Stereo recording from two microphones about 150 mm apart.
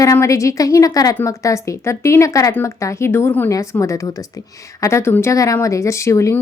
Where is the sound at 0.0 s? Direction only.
20° left (ahead or behind).